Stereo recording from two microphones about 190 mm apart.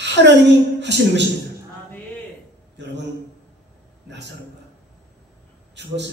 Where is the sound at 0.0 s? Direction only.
65° right (ahead or behind).